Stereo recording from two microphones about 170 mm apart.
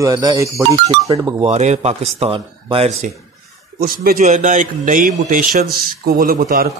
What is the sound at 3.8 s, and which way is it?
A man's voice, 55° right (ahead or behind).